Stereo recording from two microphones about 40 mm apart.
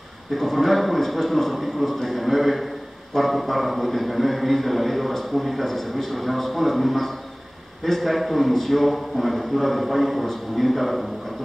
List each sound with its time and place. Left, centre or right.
0.3 s a man's voice: centre
2.0 s a man's voice: centre
2.2 s a man's voice: centre